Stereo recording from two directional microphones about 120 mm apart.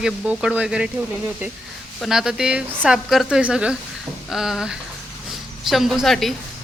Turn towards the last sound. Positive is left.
turn(degrees=0)  # may be behind; listen again after turning